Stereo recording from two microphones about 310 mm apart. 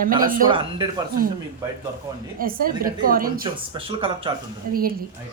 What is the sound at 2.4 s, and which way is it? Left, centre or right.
A woman's voice, right.